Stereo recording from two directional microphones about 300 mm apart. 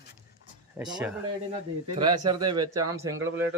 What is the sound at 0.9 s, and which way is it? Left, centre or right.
A man's voice, centre.